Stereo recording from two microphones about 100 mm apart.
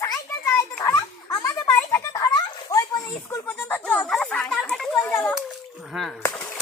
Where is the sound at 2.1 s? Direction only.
40° left (ahead or behind).